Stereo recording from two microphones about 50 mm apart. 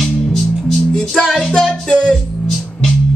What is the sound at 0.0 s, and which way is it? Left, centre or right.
Music, centre.